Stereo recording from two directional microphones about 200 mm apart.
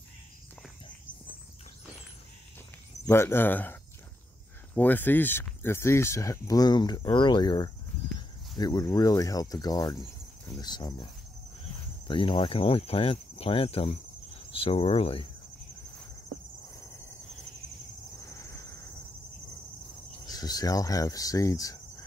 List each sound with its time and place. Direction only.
3.1 s speech: 10° left (ahead or behind)
4.7 s speech: 10° left (ahead or behind)
12.1 s speech: 25° left (ahead or behind)
18.3 s a sound: 15° left (ahead or behind)
20.2 s speech: 20° left (ahead or behind)